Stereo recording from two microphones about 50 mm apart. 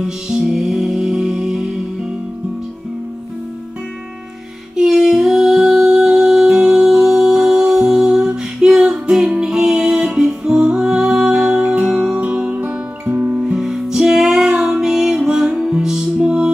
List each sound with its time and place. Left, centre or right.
0.0 s music: centre
4.7 s music: centre
11.6 s music: right
11.9 s music: centre
12.2 s music: right
13.4 s music: centre